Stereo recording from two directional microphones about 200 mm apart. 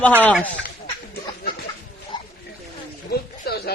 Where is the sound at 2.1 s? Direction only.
20° left (ahead or behind).